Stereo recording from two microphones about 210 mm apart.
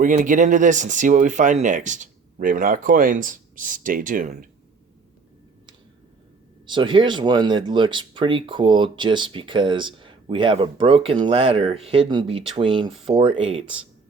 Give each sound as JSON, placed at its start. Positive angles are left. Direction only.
{"t": 0.0, "sound": "speech", "side_deg": -35}
{"t": 6.7, "sound": "speech", "side_deg": -20}